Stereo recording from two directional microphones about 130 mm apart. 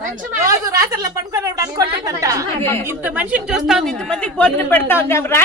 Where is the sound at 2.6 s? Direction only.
20° left (ahead or behind).